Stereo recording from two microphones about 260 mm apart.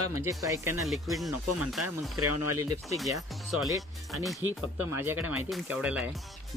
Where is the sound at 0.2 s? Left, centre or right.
Centre.